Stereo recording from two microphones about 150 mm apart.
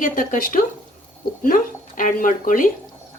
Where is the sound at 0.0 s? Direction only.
65° left (ahead or behind).